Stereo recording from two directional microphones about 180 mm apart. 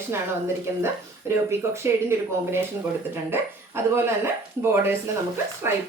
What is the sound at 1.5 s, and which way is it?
Speech, 15° right (ahead or behind).